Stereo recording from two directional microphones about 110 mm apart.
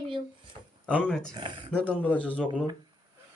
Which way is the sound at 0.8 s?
10° left (ahead or behind).